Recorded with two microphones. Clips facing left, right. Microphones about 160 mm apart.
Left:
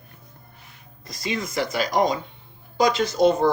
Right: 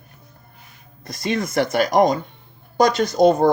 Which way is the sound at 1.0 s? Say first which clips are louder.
Right 5 dB; 60° right (ahead or behind).